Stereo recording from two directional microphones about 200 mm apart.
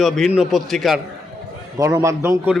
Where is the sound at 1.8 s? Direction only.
15° right (ahead or behind).